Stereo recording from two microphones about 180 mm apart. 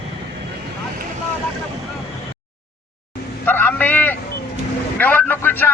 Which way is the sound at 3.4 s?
10° left (ahead or behind).